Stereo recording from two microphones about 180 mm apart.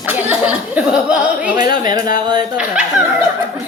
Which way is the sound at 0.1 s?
10° right (ahead or behind).